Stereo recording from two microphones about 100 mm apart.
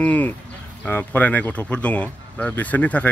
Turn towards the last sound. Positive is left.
turn(degrees=15)  # may be behind; listen again after turning